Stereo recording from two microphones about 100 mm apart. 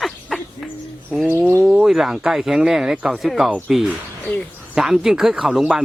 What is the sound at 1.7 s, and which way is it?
Speech, 5° right (ahead or behind).